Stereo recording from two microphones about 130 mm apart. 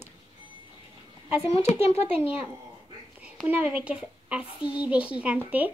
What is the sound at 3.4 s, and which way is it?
A woman's voice, 10° right (ahead or behind).